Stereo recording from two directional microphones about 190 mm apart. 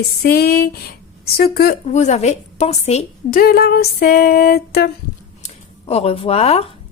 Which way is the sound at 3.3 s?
55° left (ahead or behind).